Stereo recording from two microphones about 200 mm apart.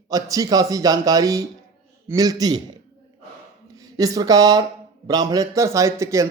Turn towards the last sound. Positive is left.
turn(degrees=-15)  # may be behind; listen again after turning